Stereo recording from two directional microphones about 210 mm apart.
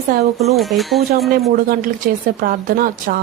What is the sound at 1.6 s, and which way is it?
A woman's voice, 40° right (ahead or behind).